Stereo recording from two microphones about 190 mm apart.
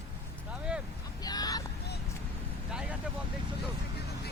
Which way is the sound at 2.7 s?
5° right (ahead or behind).